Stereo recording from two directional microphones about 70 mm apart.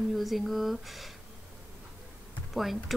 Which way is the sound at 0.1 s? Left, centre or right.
Centre.